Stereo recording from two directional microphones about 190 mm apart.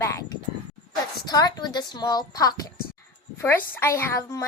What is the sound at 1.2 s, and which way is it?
Speech, 20° left (ahead or behind).